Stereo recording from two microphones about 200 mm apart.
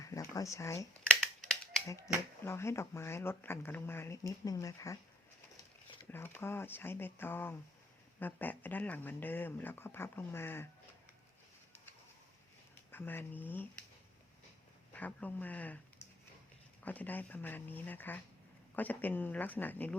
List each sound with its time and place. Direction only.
0.0 s a sound: 15° left (ahead or behind)
1.2 s a sound: centre (ahead or behind)
2.4 s speech: 15° left (ahead or behind)
6.1 s speech: 10° left (ahead or behind)
12.9 s speech: 10° left (ahead or behind)
14.9 s speech: 5° left (ahead or behind)
16.8 s speech: 10° left (ahead or behind)